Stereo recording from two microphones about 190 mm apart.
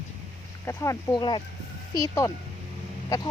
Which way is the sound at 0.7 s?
20° left (ahead or behind).